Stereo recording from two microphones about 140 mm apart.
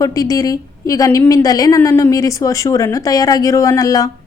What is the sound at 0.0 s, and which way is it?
A woman's voice, 25° left (ahead or behind).